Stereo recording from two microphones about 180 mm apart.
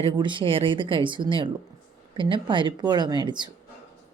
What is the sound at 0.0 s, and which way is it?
Speech, 25° right (ahead or behind).